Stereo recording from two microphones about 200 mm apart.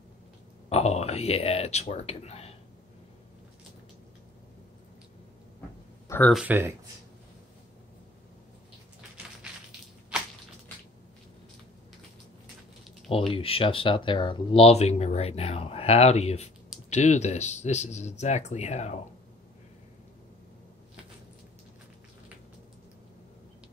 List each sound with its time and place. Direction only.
0.7 s speech: 30° left (ahead or behind)
6.0 s a sound: 10° left (ahead or behind)
6.3 s speech: 10° right (ahead or behind)
13.1 s speech: 30° left (ahead or behind)